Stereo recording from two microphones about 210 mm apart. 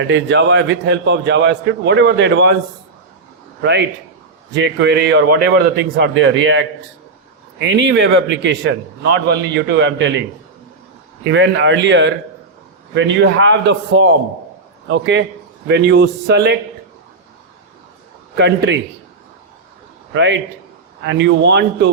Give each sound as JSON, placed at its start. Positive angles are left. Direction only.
{"t": 0.0, "sound": "a man's voice", "side_deg": -60}
{"t": 3.6, "sound": "a man's voice", "side_deg": -55}
{"t": 7.7, "sound": "a man's voice", "side_deg": -60}
{"t": 11.2, "sound": "a man's voice", "side_deg": -60}
{"t": 18.3, "sound": "a man's voice", "side_deg": -55}
{"t": 20.1, "sound": "a man's voice", "side_deg": -60}